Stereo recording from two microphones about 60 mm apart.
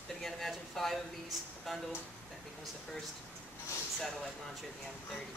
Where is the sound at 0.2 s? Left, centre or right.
Centre.